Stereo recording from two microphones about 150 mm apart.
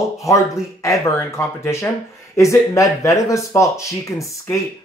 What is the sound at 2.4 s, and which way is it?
Speech, 20° left (ahead or behind).